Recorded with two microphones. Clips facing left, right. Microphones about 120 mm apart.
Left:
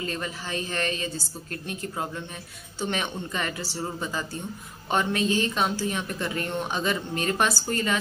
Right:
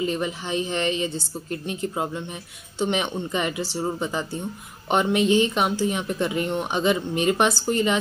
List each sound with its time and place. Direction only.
0.0 s a woman's voice: 20° right (ahead or behind)